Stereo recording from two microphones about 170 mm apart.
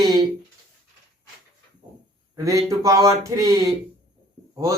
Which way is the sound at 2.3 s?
20° right (ahead or behind).